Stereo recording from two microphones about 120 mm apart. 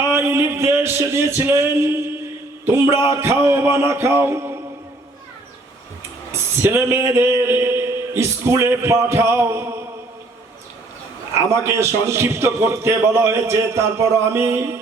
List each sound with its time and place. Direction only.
0.1 s a sound: 20° right (ahead or behind)
2.6 s a man's voice: 20° right (ahead or behind)
6.6 s a man's voice: 20° right (ahead or behind)
11.3 s a man's voice: 25° right (ahead or behind)